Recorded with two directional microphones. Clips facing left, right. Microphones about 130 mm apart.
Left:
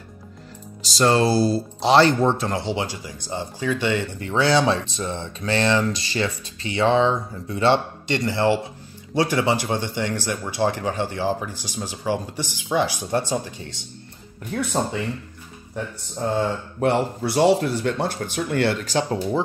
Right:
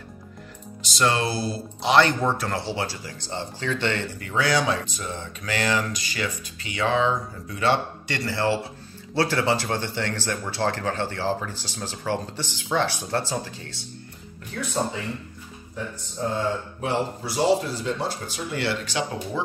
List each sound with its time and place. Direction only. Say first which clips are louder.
0.8 s speech: left 5 dB; 35° left (ahead or behind); by 4.1 s 15° left (ahead or behind)
4.2 s speech: left 4 dB; 30° left (ahead or behind)
16.8 s speech: left 7 dB; 65° left (ahead or behind); by 19.4 s 35° left (ahead or behind)